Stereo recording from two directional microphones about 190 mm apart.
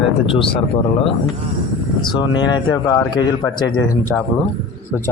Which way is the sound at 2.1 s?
25° left (ahead or behind).